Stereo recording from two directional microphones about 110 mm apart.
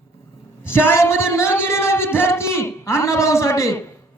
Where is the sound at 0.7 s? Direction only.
20° left (ahead or behind).